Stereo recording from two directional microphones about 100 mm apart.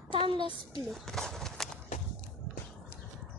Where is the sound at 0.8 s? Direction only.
Centre (ahead or behind).